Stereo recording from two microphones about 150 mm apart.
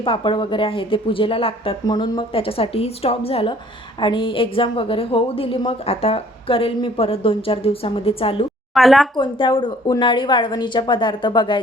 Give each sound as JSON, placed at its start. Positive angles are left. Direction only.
{"t": 0.0, "sound": "a woman's voice", "side_deg": 35}
{"t": 8.7, "sound": "speech", "side_deg": 0}
{"t": 9.1, "sound": "a woman's voice", "side_deg": 30}